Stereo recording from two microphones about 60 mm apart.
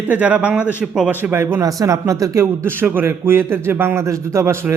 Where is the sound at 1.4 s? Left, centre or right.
Right.